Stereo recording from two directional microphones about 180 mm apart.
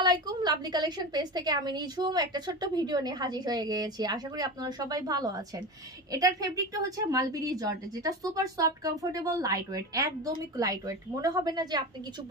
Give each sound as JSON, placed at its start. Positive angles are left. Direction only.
{"t": 0.0, "sound": "a woman's voice", "side_deg": -25}